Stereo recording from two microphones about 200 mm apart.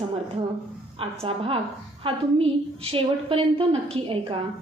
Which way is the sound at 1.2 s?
30° right (ahead or behind).